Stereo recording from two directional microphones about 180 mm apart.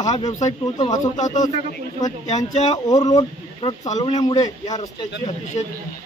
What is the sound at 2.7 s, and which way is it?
Speech, 20° left (ahead or behind).